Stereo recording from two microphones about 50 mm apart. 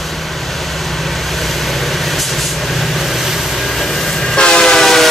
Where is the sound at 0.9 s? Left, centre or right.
Centre.